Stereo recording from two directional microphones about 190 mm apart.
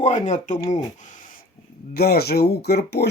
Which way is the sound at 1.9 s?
55° left (ahead or behind).